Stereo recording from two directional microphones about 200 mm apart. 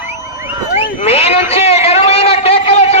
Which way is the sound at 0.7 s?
30° left (ahead or behind).